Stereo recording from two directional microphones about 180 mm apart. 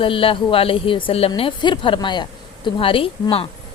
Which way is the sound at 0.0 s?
30° left (ahead or behind).